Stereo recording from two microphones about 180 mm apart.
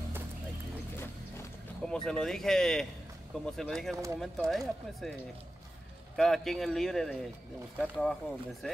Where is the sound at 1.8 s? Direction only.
5° left (ahead or behind).